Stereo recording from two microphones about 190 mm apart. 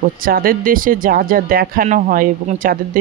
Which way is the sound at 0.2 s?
50° right (ahead or behind).